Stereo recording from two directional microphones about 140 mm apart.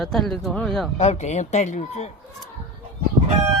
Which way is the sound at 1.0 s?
50° left (ahead or behind).